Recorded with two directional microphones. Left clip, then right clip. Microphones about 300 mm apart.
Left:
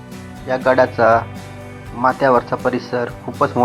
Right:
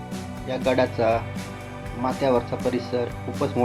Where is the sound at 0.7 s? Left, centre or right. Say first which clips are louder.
Left 9 dB; centre.